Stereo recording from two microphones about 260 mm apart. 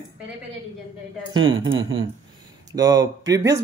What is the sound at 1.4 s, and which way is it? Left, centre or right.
Speech, right.